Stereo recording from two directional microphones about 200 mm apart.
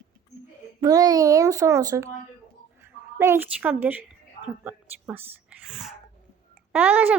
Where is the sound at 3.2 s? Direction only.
10° right (ahead or behind).